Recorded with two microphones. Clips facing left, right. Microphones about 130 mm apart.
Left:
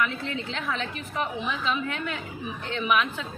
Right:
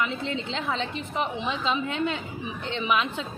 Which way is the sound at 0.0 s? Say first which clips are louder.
Even; 25° right (ahead or behind).